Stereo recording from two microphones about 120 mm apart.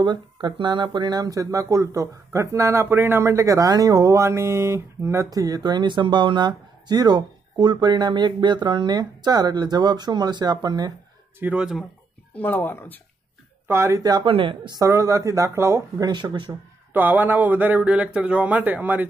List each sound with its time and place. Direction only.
0.0 s speech: 40° right (ahead or behind)
11.3 s speech: 10° right (ahead or behind)
12.4 s speech: 15° left (ahead or behind)
13.7 s speech: 25° right (ahead or behind)
14.2 s speech: 45° right (ahead or behind)
14.8 s speech: 25° right (ahead or behind)
16.1 s speech: 40° right (ahead or behind)
16.9 s speech: 15° right (ahead or behind)